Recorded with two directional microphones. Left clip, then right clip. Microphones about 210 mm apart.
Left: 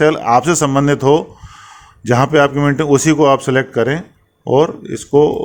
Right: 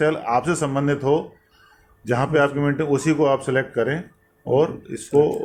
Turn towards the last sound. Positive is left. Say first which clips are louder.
# left 6 dB
turn(degrees=40)  # may be behind; listen again after turning